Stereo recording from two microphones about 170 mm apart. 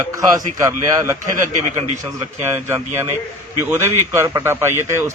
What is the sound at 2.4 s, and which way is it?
Speech, 15° right (ahead or behind).